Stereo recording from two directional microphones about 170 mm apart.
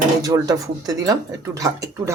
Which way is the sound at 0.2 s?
20° right (ahead or behind).